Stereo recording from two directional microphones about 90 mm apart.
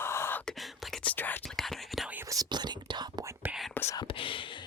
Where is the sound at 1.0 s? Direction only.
20° left (ahead or behind).